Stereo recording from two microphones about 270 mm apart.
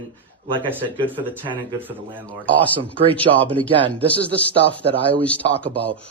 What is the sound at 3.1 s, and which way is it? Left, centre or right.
Speech, centre.